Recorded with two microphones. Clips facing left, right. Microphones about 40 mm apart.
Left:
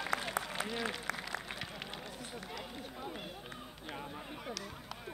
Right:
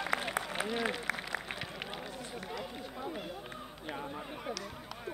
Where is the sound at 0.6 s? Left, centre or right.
Centre.